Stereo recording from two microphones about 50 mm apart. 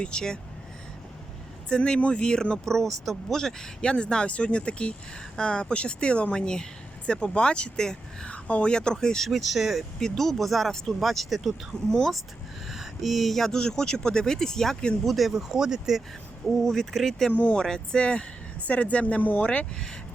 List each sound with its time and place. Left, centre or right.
0.0 s speech: centre
1.7 s speech: centre
11.9 s speech: centre
12.6 s speech: centre
16.6 s speech: centre
17.3 s speech: left
17.6 s speech: centre